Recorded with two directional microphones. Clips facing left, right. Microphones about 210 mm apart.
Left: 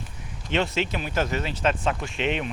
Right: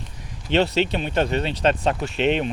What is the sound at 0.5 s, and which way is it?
Speech, 35° right (ahead or behind).